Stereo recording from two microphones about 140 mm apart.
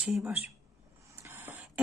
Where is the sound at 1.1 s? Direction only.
20° right (ahead or behind).